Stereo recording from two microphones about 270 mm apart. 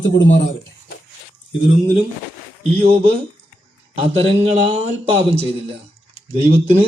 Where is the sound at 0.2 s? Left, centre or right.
Left.